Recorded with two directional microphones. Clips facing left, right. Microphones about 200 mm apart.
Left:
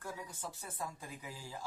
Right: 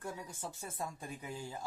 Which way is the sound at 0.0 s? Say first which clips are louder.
Right 2 dB; 25° right (ahead or behind).